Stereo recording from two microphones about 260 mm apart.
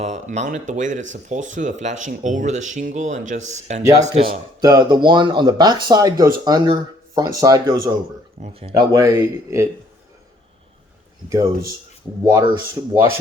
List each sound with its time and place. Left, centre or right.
0.0 s speech: right
4.6 s speech: centre
12.2 s speech: centre